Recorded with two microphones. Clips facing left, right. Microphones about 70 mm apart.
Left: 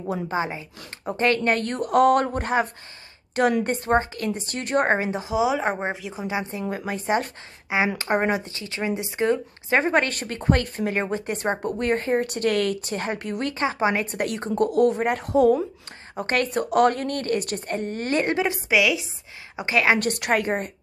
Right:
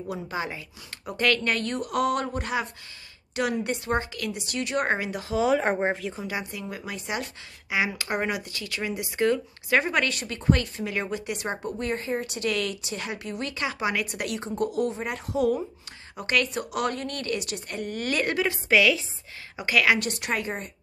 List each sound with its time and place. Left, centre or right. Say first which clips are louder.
0.1 s speech: left 6 dB; left
5.2 s speech: left 1 dB; centre
6.1 s a woman's voice: left 4 dB; left
6.7 s speech: left 10 dB; left
11.6 s a woman's voice: left 6 dB; left
13.6 s a woman's voice: left 5 dB; left
18.7 s speech: right 1 dB; centre
19.5 s a woman's voice: left 2 dB; left
20.0 s a woman's voice: left 6 dB; left